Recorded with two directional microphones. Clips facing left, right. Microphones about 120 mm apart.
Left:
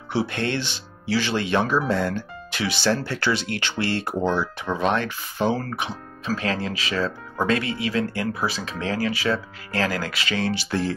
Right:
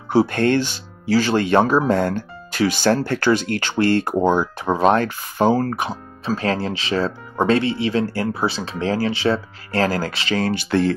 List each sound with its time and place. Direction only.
0.1 s speech: 45° right (ahead or behind)
10.4 s speech: 50° right (ahead or behind)